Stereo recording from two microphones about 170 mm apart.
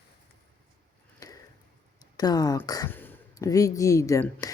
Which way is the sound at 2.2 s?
20° left (ahead or behind).